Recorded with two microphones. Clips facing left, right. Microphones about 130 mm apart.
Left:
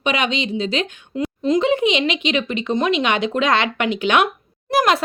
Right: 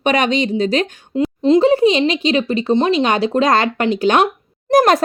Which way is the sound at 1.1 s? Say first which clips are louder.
Right 6 dB; 30° right (ahead or behind).